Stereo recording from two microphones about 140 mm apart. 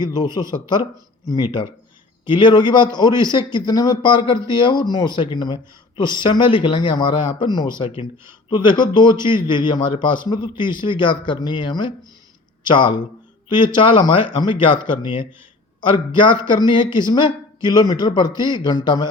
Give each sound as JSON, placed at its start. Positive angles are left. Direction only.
{"t": 0.0, "sound": "a man's voice", "side_deg": 30}